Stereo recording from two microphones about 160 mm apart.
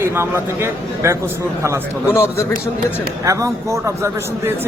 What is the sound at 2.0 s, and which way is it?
Speech, 15° left (ahead or behind).